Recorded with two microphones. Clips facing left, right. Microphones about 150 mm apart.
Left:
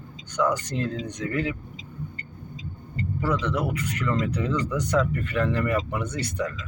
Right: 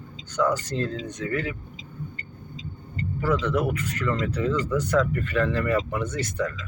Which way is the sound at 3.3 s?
15° left (ahead or behind).